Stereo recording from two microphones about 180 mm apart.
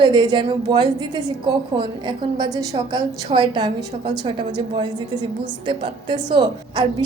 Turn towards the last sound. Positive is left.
turn(degrees=-25)  # may be behind; listen again after turning